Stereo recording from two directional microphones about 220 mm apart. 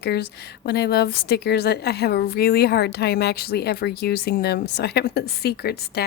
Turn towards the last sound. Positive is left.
turn(degrees=45)  # may be behind; listen again after turning